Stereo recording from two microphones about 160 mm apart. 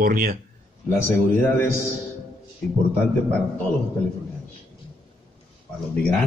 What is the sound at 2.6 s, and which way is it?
Speech, 10° left (ahead or behind).